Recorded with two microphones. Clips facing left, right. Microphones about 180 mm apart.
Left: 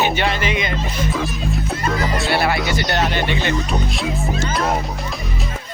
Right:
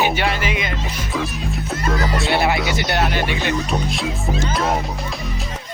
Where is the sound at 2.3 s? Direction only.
20° right (ahead or behind).